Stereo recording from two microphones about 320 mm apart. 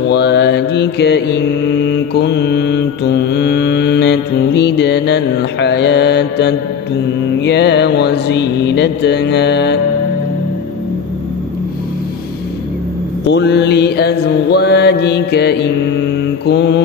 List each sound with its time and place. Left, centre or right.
0.1 s mantra: left
13.3 s mantra: left